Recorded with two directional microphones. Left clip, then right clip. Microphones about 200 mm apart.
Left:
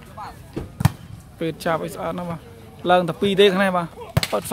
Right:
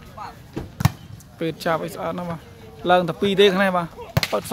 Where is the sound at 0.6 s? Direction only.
50° right (ahead or behind).